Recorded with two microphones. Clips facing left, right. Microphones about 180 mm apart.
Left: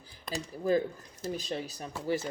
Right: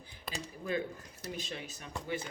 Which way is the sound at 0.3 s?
35° left (ahead or behind).